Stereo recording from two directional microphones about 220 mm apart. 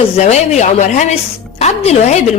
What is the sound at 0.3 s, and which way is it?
A woman's voice, 30° left (ahead or behind).